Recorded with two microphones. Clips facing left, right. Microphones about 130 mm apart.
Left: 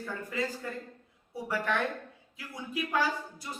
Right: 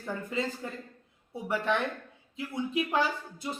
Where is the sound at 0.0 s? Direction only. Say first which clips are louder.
Right 2 dB; 25° right (ahead or behind).